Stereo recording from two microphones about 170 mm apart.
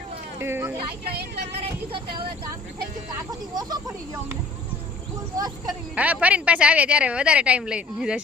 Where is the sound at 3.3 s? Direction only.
25° right (ahead or behind).